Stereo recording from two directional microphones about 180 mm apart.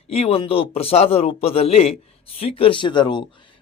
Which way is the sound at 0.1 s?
35° left (ahead or behind).